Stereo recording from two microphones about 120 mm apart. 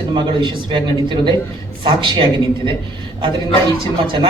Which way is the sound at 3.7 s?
45° right (ahead or behind).